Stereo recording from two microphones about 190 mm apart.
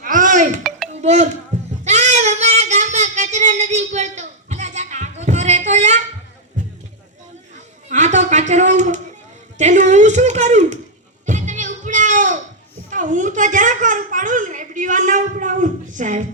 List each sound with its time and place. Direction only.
0.0 s music: 45° right (ahead or behind)
1.0 s speech: 35° right (ahead or behind)
1.8 s child singing: 35° right (ahead or behind)
7.9 s a sound: 40° right (ahead or behind)
11.3 s music: 40° right (ahead or behind)
12.9 s a sound: 40° right (ahead or behind)